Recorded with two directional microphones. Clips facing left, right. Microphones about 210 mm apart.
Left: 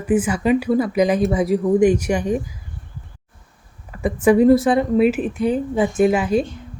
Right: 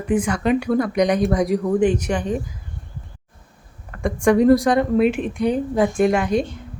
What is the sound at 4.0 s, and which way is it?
Speech, 5° left (ahead or behind).